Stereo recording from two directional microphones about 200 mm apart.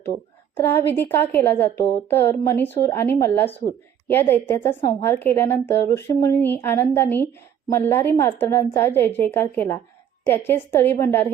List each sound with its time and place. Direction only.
0.5 s a woman's voice: 10° left (ahead or behind)